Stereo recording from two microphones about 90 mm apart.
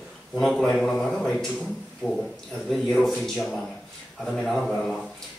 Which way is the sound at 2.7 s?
5° left (ahead or behind).